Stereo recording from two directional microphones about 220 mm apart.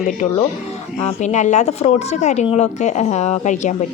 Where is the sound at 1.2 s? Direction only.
35° left (ahead or behind).